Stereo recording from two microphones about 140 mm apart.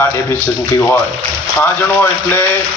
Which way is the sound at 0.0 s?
20° left (ahead or behind).